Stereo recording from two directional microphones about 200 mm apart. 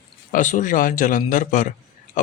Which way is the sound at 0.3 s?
40° left (ahead or behind).